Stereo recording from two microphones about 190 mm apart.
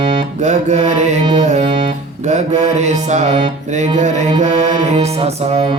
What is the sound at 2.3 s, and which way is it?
Mantra, 40° right (ahead or behind).